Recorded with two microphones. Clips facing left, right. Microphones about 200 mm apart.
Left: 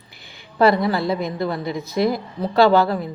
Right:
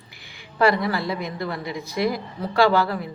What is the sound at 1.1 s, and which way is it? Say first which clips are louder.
A woman's voice: left 5 dB; 25° left (ahead or behind).